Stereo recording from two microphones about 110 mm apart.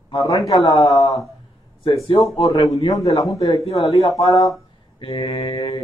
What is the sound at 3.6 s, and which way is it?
Speech, 60° left (ahead or behind).